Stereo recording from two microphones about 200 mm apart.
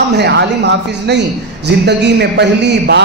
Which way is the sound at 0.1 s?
60° right (ahead or behind).